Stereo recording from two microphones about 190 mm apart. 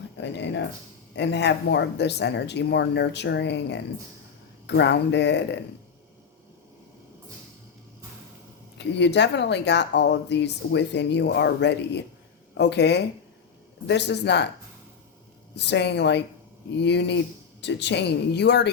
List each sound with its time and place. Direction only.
0.2 s speech: 70° left (ahead or behind)
8.8 s speech: 65° left (ahead or behind)
15.5 s speech: 65° left (ahead or behind)